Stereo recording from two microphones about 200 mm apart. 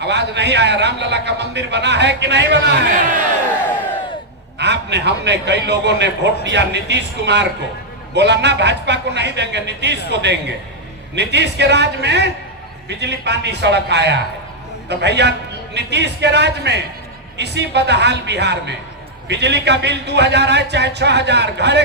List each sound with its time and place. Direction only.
0.0 s a man's voice: 60° right (ahead or behind)
4.5 s a man's voice: 60° right (ahead or behind)